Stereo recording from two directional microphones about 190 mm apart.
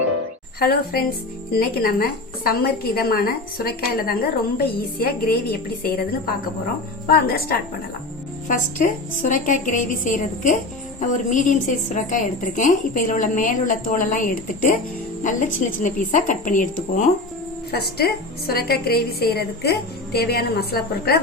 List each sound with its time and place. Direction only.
0.6 s a woman's voice: 50° left (ahead or behind)
17.7 s a woman's voice: 55° left (ahead or behind)